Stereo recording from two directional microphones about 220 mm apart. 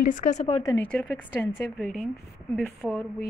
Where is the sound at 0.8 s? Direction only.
5° left (ahead or behind).